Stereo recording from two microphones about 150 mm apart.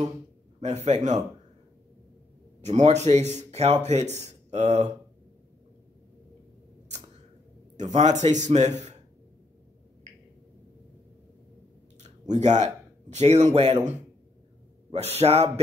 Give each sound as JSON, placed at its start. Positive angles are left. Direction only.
{"t": 0.6, "sound": "a man's voice", "side_deg": -50}
{"t": 2.6, "sound": "speech", "side_deg": -50}
{"t": 7.9, "sound": "speech", "side_deg": -50}
{"t": 12.0, "sound": "a sound", "side_deg": -50}
{"t": 13.1, "sound": "speech", "side_deg": -45}